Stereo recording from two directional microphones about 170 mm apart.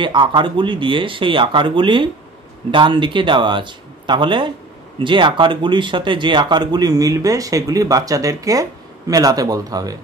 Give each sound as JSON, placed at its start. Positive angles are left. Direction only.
{"t": 0.0, "sound": "speech", "side_deg": -30}